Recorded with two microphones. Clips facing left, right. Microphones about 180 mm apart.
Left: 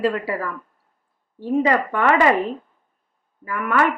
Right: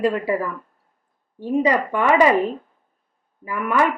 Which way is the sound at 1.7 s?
15° right (ahead or behind).